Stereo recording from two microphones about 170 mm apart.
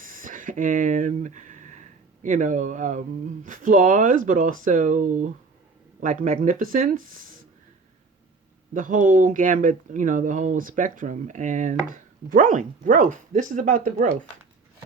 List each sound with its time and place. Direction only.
0.0 s speech: 50° right (ahead or behind)
8.7 s speech: 50° right (ahead or behind)